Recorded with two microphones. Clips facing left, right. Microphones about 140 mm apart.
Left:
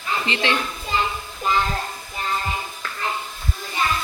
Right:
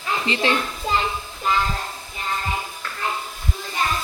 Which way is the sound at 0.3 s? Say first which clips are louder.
Right 4 dB; 35° right (ahead or behind).